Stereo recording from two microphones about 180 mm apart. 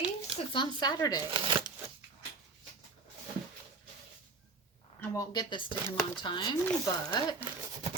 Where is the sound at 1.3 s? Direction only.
30° right (ahead or behind).